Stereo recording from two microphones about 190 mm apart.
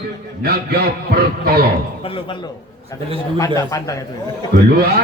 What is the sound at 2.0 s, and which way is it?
Speech, 25° left (ahead or behind).